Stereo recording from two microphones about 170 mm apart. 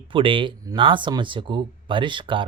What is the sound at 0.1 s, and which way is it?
Speech, 30° right (ahead or behind).